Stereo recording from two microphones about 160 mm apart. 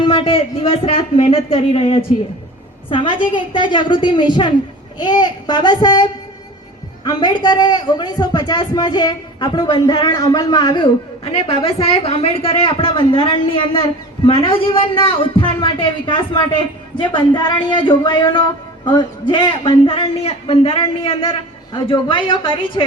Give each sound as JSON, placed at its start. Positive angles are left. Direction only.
{"t": 0.0, "sound": "a man's voice", "side_deg": 35}